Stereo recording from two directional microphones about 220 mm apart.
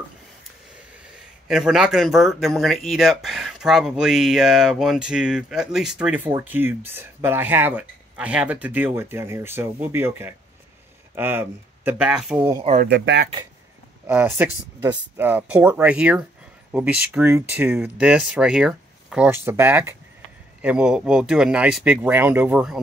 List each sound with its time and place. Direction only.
1.5 s speech: 5° right (ahead or behind)
12.8 s speech: 55° right (ahead or behind)
14.0 s speech: 10° right (ahead or behind)